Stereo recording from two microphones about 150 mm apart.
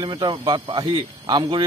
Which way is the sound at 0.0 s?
30° right (ahead or behind).